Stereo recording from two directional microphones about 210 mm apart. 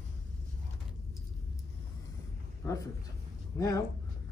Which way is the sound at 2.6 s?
15° left (ahead or behind).